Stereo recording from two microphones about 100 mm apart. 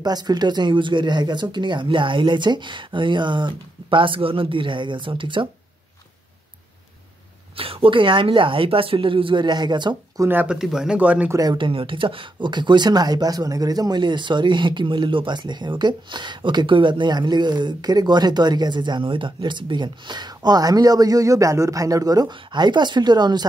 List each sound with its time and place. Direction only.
0.0 s speech: 40° right (ahead or behind); by 5.5 s 60° right (ahead or behind)
7.5 s a woman's voice: 65° right (ahead or behind); by 10.2 s 50° right (ahead or behind)
10.2 s speech: 20° right (ahead or behind)
10.5 s speech: 5° right (ahead or behind)
11.2 s speech: 35° right (ahead or behind)
11.5 s speech: 55° right (ahead or behind)